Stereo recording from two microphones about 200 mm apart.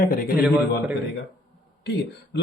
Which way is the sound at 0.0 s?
45° left (ahead or behind).